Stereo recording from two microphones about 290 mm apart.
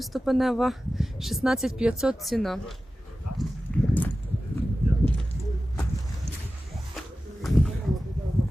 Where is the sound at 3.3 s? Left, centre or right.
Left.